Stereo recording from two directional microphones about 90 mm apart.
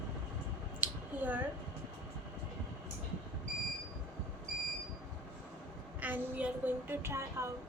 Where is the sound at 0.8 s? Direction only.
20° right (ahead or behind).